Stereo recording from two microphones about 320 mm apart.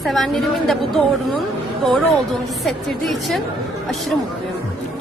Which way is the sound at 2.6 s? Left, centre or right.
Centre.